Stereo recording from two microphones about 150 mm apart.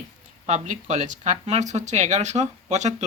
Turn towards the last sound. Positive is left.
turn(degrees=-50)  # may be behind; listen again after turning